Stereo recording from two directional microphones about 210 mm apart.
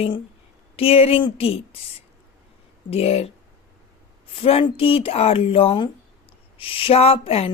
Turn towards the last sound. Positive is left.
turn(degrees=30)  # may be behind; listen again after turning